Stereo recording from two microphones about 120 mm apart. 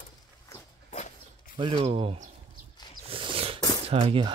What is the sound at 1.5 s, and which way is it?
Speech, 40° right (ahead or behind).